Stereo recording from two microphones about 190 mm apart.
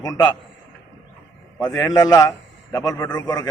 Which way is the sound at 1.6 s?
15° left (ahead or behind).